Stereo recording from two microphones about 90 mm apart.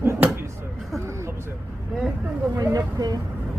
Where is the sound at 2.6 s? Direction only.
40° right (ahead or behind).